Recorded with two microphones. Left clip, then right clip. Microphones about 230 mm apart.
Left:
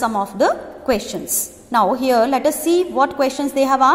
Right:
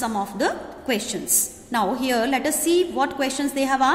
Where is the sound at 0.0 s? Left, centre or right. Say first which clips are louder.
Left 7 dB; centre.